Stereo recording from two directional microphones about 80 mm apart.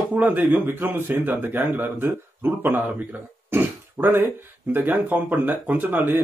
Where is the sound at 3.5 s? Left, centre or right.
Right.